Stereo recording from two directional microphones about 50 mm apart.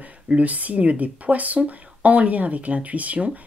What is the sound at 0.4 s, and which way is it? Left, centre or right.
Speech, right.